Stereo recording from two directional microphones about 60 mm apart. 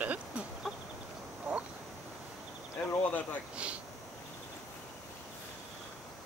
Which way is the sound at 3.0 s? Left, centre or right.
Left.